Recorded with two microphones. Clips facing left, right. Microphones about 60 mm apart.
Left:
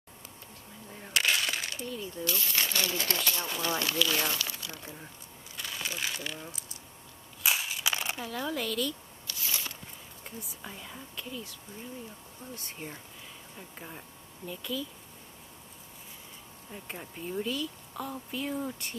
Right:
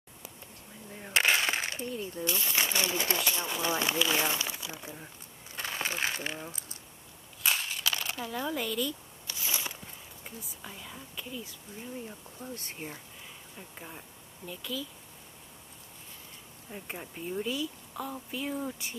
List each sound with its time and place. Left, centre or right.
1.1 s speech: right
5.6 s speech: right
7.4 s crushing: centre
7.8 s crumpling: centre
8.3 s speech: centre
9.3 s a sound: centre
10.2 s speech: centre
11.2 s speech: centre
12.7 s speech: centre
13.6 s speech: centre
16.7 s speech: centre